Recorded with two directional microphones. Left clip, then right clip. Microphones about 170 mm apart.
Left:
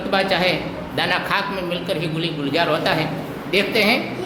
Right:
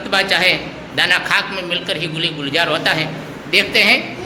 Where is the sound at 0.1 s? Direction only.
Centre (ahead or behind).